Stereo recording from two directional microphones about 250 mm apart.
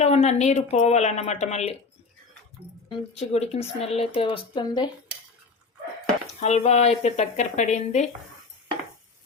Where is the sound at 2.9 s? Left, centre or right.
Left.